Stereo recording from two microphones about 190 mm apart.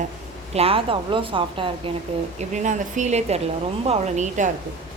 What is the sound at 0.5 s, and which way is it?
Speech, 30° right (ahead or behind).